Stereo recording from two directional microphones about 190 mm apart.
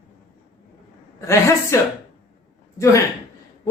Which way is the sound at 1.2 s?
15° left (ahead or behind).